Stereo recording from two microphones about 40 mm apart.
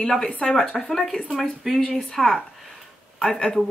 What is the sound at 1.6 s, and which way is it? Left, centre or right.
Speech, centre.